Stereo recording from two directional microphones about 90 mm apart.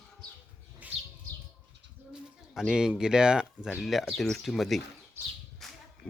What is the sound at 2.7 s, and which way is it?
Speech, 5° right (ahead or behind).